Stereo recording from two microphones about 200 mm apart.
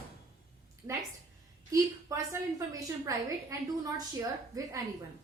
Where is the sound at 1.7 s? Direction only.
15° right (ahead or behind).